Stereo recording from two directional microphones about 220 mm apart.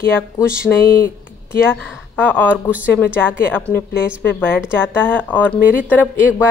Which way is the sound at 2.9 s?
10° left (ahead or behind).